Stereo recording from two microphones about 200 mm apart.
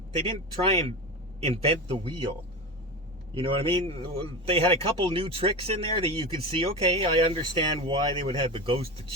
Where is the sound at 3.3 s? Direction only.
30° right (ahead or behind).